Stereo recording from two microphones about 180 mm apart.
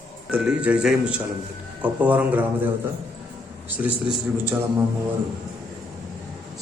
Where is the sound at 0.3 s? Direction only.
5° right (ahead or behind).